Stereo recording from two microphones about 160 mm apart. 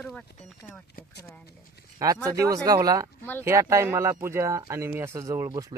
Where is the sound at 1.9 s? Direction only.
20° right (ahead or behind).